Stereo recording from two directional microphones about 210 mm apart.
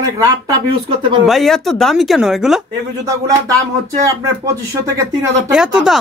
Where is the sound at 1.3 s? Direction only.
Centre (ahead or behind).